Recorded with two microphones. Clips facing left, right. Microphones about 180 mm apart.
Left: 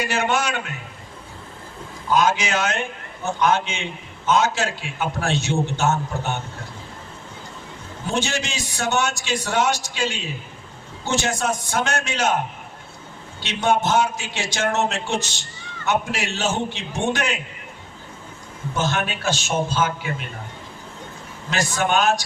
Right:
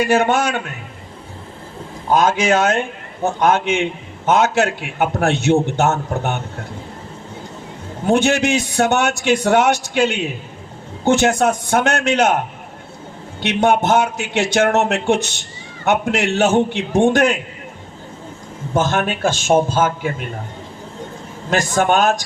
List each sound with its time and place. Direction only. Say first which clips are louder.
0.1 s a man's voice: right 7 dB; 50° right (ahead or behind)
2.0 s a man's voice: right 5 dB; 50° right (ahead or behind)
8.0 s a man's voice: right 10 dB; 60° right (ahead or behind)
13.4 s a man's voice: right 5 dB; 60° right (ahead or behind)
18.7 s a man's voice: right 6 dB; 50° right (ahead or behind)
21.5 s a man's voice: right 5 dB; 45° right (ahead or behind)